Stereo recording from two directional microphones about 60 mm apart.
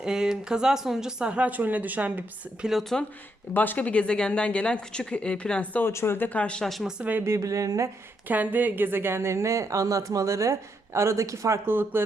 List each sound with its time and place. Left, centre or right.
0.0 s speech: centre
2.9 s speech: centre
3.5 s speech: left
5.8 s speech: left
6.1 s speech: left
7.0 s speech: right
7.3 s a woman's voice: right
8.3 s a woman's voice: right
11.6 s speech: right